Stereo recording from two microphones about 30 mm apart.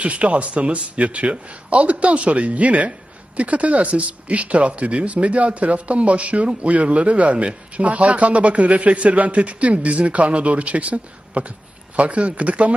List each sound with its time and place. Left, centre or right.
0.0 s speech: right